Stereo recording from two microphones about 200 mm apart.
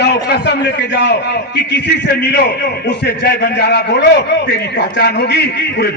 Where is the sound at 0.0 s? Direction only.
55° left (ahead or behind).